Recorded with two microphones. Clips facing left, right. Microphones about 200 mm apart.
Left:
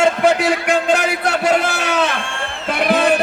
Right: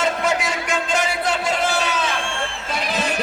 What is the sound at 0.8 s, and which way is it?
A man's voice, 65° left (ahead or behind).